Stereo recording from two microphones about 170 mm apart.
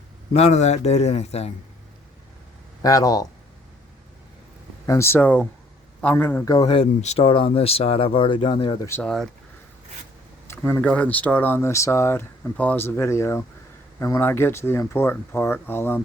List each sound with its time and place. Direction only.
0.3 s speech: 40° left (ahead or behind)
2.8 s speech: 20° left (ahead or behind)
4.9 s speech: 15° left (ahead or behind)
6.5 s speech: 30° left (ahead or behind)
9.0 s speech: centre (ahead or behind)
10.4 s speech: 15° left (ahead or behind)